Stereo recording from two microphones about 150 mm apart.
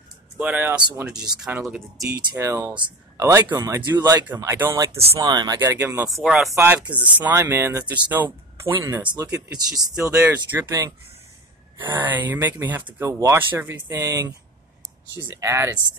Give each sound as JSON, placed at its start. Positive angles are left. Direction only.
{"t": 0.4, "sound": "speech", "side_deg": -10}
{"t": 2.3, "sound": "speech", "side_deg": -20}
{"t": 4.9, "sound": "speech", "side_deg": -40}
{"t": 5.2, "sound": "speech", "side_deg": -25}
{"t": 6.1, "sound": "speech", "side_deg": 0}
{"t": 6.5, "sound": "speech", "side_deg": -15}
{"t": 9.2, "sound": "speech", "side_deg": -25}
{"t": 10.2, "sound": "speech", "side_deg": -10}
{"t": 11.8, "sound": "speech", "side_deg": -15}